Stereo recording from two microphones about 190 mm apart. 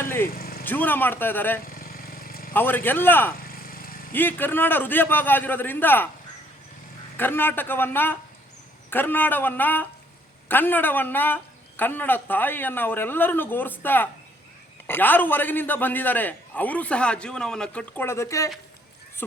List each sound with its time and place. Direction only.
0.0 s vehicle: 10° left (ahead or behind)
0.3 s vehicle: 50° left (ahead or behind)
0.6 s a man's voice: 10° left (ahead or behind)
1.6 s vehicle: 50° left (ahead or behind)
2.5 s a man's voice: 10° left (ahead or behind)
7.2 s a man's voice: 10° left (ahead or behind)